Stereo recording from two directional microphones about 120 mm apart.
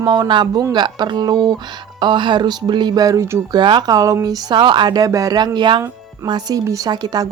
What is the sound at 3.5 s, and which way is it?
A woman's voice, 40° right (ahead or behind).